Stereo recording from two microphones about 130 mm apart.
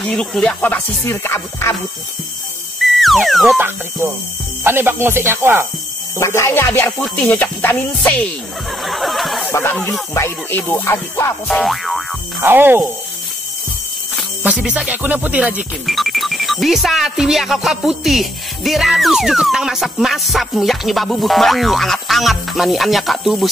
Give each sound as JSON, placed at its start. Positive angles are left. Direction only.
{"t": 0.0, "sound": "music", "side_deg": 5}
{"t": 2.8, "sound": "music", "side_deg": 0}
{"t": 3.5, "sound": "speech", "side_deg": -15}
{"t": 6.1, "sound": "music", "side_deg": 20}
{"t": 8.8, "sound": "a sound", "side_deg": 0}
{"t": 9.5, "sound": "music", "side_deg": 15}
{"t": 11.4, "sound": "boing", "side_deg": 0}
{"t": 12.4, "sound": "speech", "side_deg": -15}
{"t": 14.4, "sound": "speech", "side_deg": -10}